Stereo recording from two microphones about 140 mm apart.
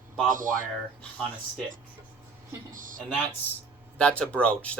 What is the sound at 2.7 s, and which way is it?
Speech, 70° right (ahead or behind).